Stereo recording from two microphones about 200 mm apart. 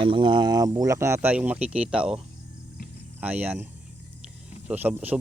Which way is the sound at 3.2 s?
10° right (ahead or behind).